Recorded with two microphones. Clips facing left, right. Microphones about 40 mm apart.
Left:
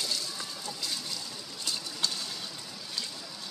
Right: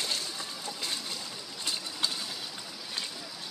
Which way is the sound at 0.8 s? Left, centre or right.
Right.